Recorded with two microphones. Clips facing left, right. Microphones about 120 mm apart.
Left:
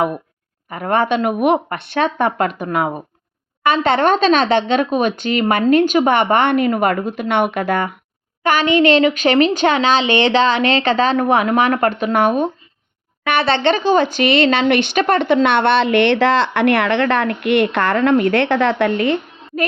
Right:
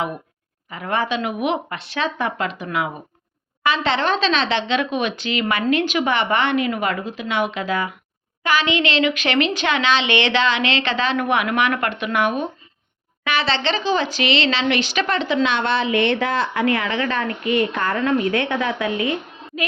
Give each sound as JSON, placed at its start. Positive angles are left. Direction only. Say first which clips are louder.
{"t": 0.7, "sound": "a woman's voice", "louder": "left 6 dB", "side_deg": 50}
{"t": 8.4, "sound": "a woman's voice", "louder": "left 7 dB", "side_deg": 50}
{"t": 13.2, "sound": "speech", "louder": "left 6 dB", "side_deg": 55}